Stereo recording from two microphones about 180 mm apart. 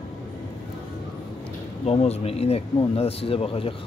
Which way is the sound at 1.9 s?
35° left (ahead or behind).